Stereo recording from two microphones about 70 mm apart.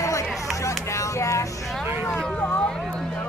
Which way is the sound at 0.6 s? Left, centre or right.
Left.